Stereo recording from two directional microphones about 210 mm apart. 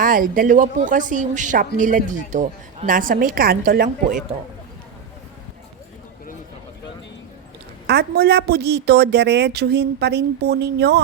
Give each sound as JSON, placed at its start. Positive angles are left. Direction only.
{"t": 0.0, "sound": "a woman's voice", "side_deg": -40}
{"t": 7.9, "sound": "speech", "side_deg": -50}